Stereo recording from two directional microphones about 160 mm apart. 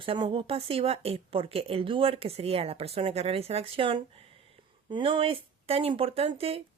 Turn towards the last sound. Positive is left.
turn(degrees=-35)  # may be behind; listen again after turning